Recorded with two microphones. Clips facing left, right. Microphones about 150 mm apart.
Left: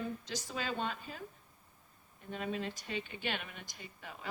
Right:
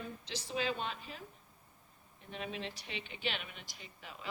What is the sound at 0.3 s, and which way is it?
Speech, 45° left (ahead or behind).